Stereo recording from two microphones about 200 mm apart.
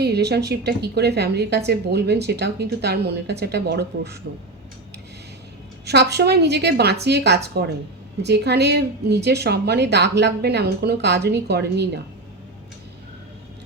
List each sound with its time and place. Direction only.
0.0 s a woman's voice: 55° right (ahead or behind)
5.8 s a woman's voice: 55° right (ahead or behind)